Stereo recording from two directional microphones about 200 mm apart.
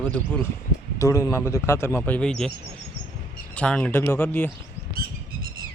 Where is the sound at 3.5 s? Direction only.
5° left (ahead or behind).